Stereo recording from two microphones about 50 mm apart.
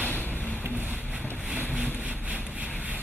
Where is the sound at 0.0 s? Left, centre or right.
Left.